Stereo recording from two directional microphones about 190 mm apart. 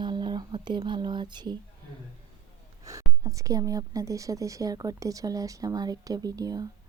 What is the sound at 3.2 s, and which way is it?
A woman's voice, 15° right (ahead or behind).